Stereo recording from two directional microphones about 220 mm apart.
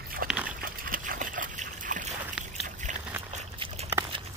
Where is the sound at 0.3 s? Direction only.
5° right (ahead or behind).